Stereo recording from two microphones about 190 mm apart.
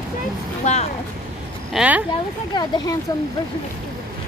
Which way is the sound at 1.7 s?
5° right (ahead or behind).